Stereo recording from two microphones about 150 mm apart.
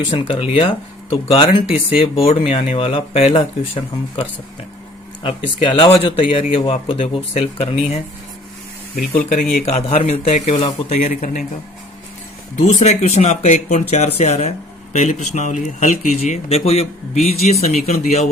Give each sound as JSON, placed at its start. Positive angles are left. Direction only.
{"t": 0.0, "sound": "speech", "side_deg": 35}
{"t": 9.0, "sound": "speech", "side_deg": 70}
{"t": 9.6, "sound": "speech", "side_deg": 45}
{"t": 10.9, "sound": "speech", "side_deg": 55}
{"t": 12.5, "sound": "speech", "side_deg": 50}